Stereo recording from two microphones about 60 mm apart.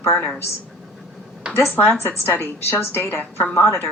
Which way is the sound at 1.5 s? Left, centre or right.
Left.